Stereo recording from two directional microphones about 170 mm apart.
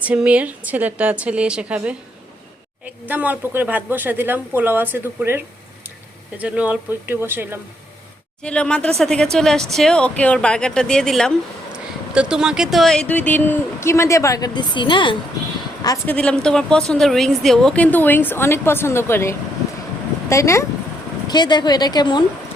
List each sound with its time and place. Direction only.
0.0 s speech: 10° right (ahead or behind)
8.4 s speech: 5° left (ahead or behind); by 15.1 s 30° left (ahead or behind)
16.0 s a woman's voice: 5° left (ahead or behind); by 22.2 s 25° left (ahead or behind)